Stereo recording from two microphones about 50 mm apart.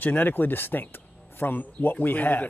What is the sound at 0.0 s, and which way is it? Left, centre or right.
Speech, left.